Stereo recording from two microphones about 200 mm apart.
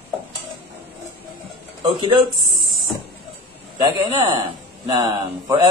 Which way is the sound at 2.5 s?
Centre (ahead or behind).